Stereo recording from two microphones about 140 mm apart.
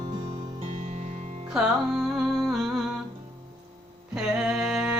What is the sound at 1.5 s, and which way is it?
Music, centre (ahead or behind).